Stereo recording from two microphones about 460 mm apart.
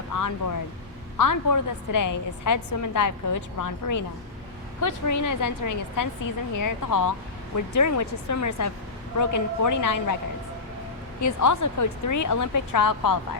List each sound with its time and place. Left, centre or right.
0.1 s a woman's voice: left
11.2 s a woman's voice: left